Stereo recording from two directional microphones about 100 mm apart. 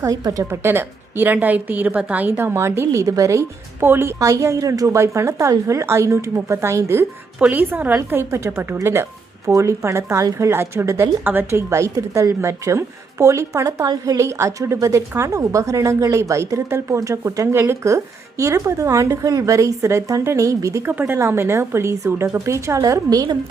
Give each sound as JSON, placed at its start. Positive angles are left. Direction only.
{"t": 0.0, "sound": "speech", "side_deg": -35}
{"t": 0.6, "sound": "a woman's voice", "side_deg": -20}
{"t": 7.3, "sound": "a woman's voice", "side_deg": -15}
{"t": 11.7, "sound": "speech", "side_deg": -30}
{"t": 20.9, "sound": "a woman's voice", "side_deg": -20}